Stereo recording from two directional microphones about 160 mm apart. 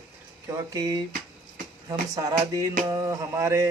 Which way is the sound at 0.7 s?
20° right (ahead or behind).